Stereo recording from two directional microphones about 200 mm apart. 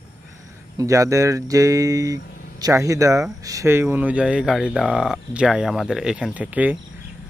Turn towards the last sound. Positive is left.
turn(degrees=-5)  # may be behind; listen again after turning